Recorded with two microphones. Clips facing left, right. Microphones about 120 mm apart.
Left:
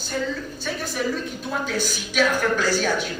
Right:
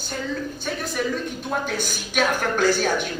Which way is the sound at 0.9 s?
50° right (ahead or behind).